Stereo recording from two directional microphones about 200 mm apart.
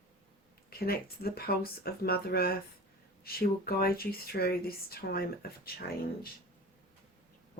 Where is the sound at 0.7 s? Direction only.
50° left (ahead or behind).